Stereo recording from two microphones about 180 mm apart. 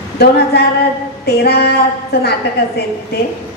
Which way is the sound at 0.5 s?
65° left (ahead or behind).